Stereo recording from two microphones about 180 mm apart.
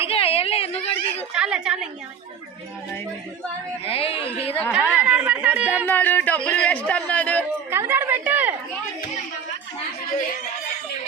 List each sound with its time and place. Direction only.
0.1 s a sound: 35° left (ahead or behind)
1.3 s a woman's voice: 5° right (ahead or behind)
3.8 s speech: 30° left (ahead or behind)
4.7 s speech: 10° right (ahead or behind)
5.8 s speech: 10° left (ahead or behind)
7.7 s speech: 10° right (ahead or behind)